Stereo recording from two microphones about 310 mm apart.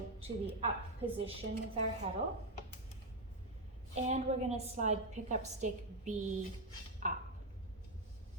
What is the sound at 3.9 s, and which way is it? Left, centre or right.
A woman's voice, right.